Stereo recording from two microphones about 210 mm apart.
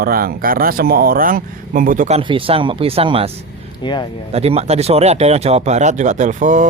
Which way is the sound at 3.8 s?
20° left (ahead or behind).